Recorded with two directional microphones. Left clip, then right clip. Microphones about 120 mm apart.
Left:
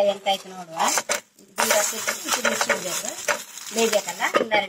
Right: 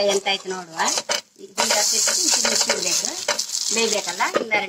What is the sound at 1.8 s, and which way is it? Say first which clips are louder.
Speech: right 3 dB; 25° left (ahead or behind).